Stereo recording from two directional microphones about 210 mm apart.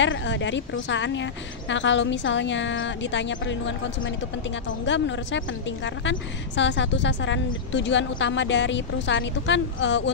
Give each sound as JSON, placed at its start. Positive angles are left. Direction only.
{"t": 0.0, "sound": "a woman's voice", "side_deg": 60}